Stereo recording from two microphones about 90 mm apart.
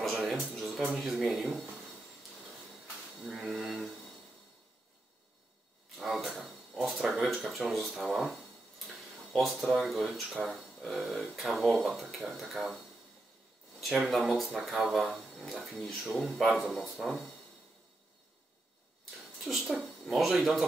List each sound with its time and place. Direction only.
0.0 s music: centre (ahead or behind)
0.9 s speech: centre (ahead or behind)
3.3 s speech: centre (ahead or behind)
5.9 s a sound: centre (ahead or behind)
9.3 s speech: centre (ahead or behind)
13.7 s speech: centre (ahead or behind)
19.4 s speech: 5° right (ahead or behind)